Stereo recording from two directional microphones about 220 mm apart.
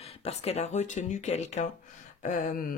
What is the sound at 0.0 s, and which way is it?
Speech, 30° left (ahead or behind).